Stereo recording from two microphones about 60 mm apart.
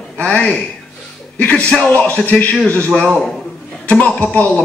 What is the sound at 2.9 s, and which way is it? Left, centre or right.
Speech, centre.